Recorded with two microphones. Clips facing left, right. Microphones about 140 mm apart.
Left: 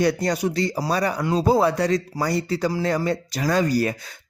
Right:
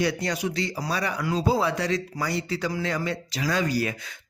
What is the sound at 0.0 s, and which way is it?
Speech, 40° left (ahead or behind).